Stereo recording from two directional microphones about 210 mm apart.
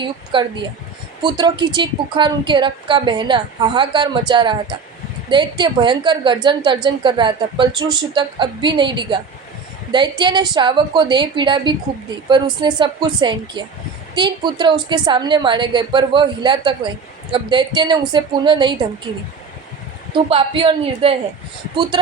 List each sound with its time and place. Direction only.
0.0 s a woman's voice: 25° right (ahead or behind)
20.3 s a woman's voice: 25° right (ahead or behind)